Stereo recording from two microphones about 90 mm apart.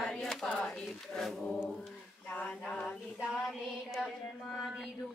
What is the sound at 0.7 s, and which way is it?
Speech, 5° left (ahead or behind).